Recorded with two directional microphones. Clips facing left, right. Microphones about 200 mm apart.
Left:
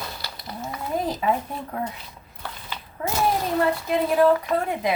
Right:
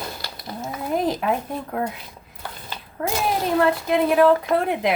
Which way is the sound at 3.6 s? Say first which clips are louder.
Right 5 dB; 75° right (ahead or behind).